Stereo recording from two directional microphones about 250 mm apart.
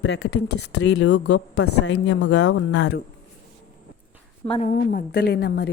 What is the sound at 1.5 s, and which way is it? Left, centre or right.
Speech, left.